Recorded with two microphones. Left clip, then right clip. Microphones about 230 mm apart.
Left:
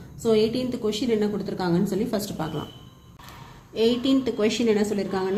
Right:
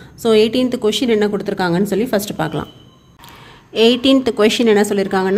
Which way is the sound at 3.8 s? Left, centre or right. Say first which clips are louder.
Right 10 dB; right.